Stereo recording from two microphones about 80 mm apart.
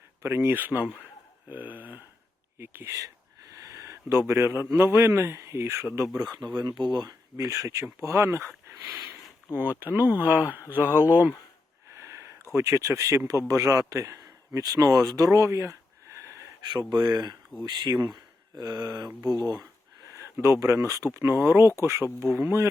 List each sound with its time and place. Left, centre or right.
0.2 s speech: right
3.5 s a sound: right
4.7 s speech: right
6.4 s speech: right
9.6 s speech: right
10.8 s speech: left
11.1 s speech: right
12.5 s a man's voice: right
16.7 s a sound: right
20.1 s speech: right